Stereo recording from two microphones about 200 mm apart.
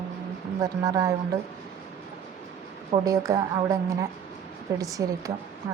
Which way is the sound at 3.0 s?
15° right (ahead or behind).